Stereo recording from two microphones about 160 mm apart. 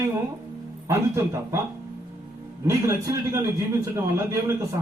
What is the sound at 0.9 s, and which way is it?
Speech, 15° right (ahead or behind).